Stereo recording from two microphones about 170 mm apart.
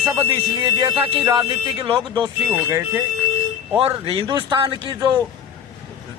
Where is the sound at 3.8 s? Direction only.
35° right (ahead or behind).